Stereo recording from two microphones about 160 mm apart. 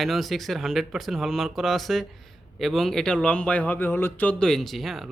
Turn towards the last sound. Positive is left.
turn(degrees=0)  # may be behind; listen again after turning